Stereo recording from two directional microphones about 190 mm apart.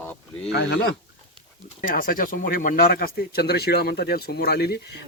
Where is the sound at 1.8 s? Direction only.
45° left (ahead or behind).